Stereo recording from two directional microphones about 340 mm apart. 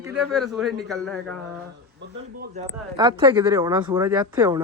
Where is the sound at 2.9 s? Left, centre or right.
Centre.